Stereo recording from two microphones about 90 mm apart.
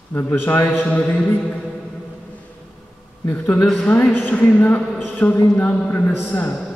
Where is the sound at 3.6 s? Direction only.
5° left (ahead or behind).